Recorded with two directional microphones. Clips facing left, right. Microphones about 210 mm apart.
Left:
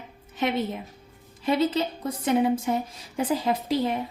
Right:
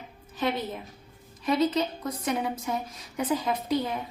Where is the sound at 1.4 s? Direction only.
30° left (ahead or behind).